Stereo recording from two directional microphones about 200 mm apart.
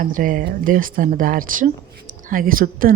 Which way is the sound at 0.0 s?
40° right (ahead or behind).